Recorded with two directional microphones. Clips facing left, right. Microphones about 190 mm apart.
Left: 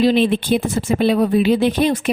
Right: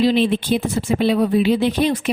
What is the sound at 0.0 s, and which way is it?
Speech, 50° left (ahead or behind).